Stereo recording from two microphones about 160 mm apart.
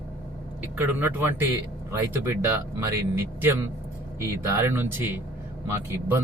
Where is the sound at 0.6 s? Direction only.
10° right (ahead or behind).